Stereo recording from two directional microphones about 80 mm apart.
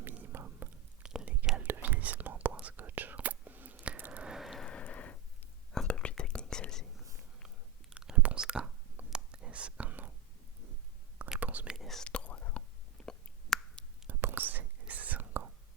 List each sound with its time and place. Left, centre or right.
0.3 s whispering: right; by 4.6 s centre
4.8 s a sound: centre
5.7 s whispering: centre
7.4 s whispering: centre
11.3 s whispering: centre
11.7 s whispering: centre
12.0 s whispering: centre
13.1 s a sound: centre
14.1 s whispering: right